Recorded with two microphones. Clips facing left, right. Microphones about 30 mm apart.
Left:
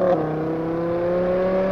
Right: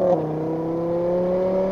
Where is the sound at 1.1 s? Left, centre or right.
Left.